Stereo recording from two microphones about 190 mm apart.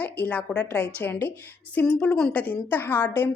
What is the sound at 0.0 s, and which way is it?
A woman's voice, 10° left (ahead or behind).